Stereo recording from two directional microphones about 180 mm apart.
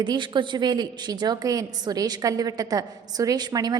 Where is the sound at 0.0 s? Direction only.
25° right (ahead or behind).